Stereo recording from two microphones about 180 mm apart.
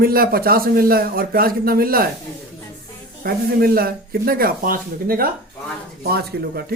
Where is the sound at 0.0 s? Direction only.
55° right (ahead or behind).